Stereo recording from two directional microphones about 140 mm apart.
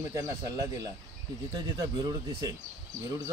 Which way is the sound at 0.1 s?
25° right (ahead or behind).